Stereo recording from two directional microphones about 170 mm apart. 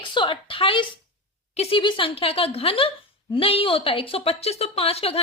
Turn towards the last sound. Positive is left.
turn(degrees=35)  # may be behind; listen again after turning